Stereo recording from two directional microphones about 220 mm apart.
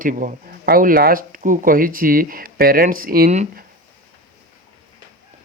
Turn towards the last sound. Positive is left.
turn(degrees=-35)  # may be behind; listen again after turning